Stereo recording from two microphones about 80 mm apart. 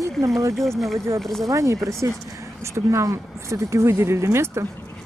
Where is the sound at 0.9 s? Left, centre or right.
Right.